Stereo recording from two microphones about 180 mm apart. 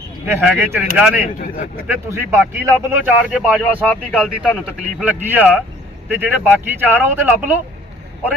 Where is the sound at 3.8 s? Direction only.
5° left (ahead or behind).